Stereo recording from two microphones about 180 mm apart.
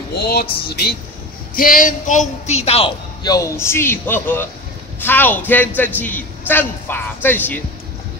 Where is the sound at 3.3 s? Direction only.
20° left (ahead or behind).